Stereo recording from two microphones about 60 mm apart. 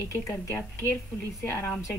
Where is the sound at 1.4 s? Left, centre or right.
Left.